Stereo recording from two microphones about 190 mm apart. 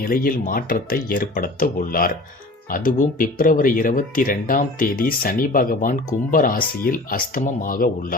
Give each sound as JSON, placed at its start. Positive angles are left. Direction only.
{"t": 0.1, "sound": "speech", "side_deg": 45}